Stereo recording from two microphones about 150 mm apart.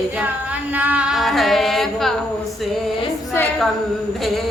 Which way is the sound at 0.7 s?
10° right (ahead or behind).